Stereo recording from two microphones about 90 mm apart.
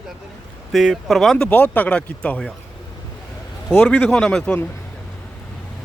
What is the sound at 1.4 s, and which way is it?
Speech, 15° left (ahead or behind).